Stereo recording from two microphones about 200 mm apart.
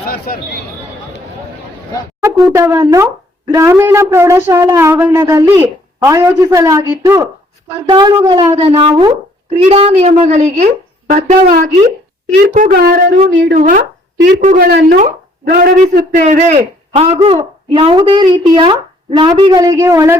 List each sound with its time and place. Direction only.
0.1 s speech: 50° left (ahead or behind)
2.2 s a woman's voice: 15° right (ahead or behind); by 11.6 s 40° right (ahead or behind)
12.6 s a woman's voice: 45° right (ahead or behind); by 20.1 s 15° right (ahead or behind)